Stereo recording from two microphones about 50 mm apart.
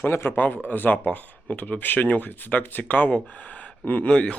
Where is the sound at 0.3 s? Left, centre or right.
Left.